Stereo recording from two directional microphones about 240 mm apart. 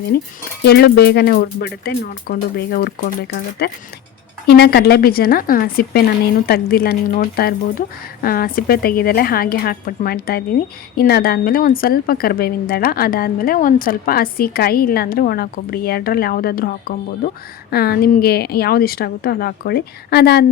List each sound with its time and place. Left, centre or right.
0.6 s a woman's voice: left